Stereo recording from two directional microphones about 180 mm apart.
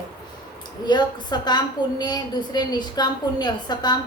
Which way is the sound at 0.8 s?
25° left (ahead or behind).